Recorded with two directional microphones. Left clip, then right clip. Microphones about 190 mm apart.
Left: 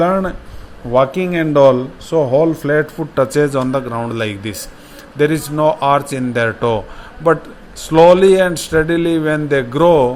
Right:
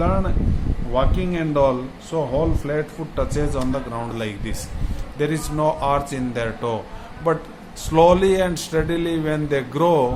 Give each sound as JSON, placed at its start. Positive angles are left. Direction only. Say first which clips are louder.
{"t": 0.0, "sound": "a man's voice", "louder": "left 8 dB", "side_deg": 40}